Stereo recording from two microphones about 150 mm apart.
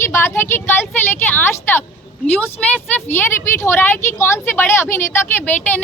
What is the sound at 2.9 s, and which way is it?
A woman's voice, 15° left (ahead or behind).